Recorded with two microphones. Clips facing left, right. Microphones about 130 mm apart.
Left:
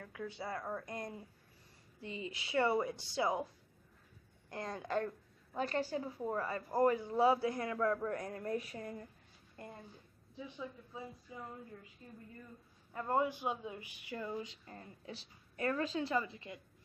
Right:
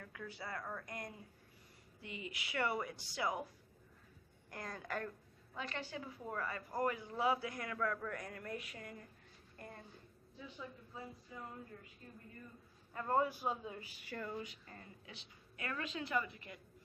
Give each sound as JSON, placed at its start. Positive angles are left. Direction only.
{"t": 0.0, "sound": "a woman's voice", "side_deg": 25}
{"t": 4.5, "sound": "a woman's voice", "side_deg": 25}
{"t": 5.6, "sound": "a man's voice", "side_deg": 40}
{"t": 9.6, "sound": "a woman's voice", "side_deg": 25}
{"t": 12.9, "sound": "a woman's voice", "side_deg": 15}
{"t": 14.4, "sound": "a woman's voice", "side_deg": 25}